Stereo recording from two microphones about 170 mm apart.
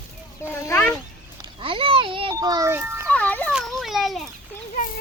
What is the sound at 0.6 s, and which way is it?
Speech, 10° left (ahead or behind).